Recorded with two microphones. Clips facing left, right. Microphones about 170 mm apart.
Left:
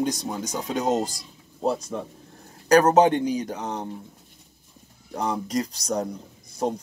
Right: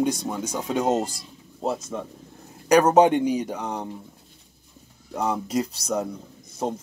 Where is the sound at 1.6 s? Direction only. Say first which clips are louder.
Left 2 dB; centre (ahead or behind).